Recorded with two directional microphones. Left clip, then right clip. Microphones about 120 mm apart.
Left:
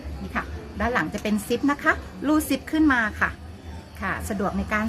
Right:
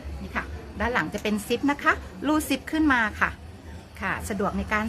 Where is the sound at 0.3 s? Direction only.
30° right (ahead or behind).